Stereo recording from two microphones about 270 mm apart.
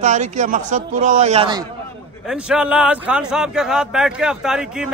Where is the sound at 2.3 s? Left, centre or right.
Centre.